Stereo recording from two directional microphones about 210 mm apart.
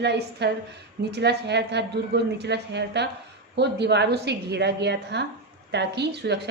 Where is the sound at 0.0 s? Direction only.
55° right (ahead or behind).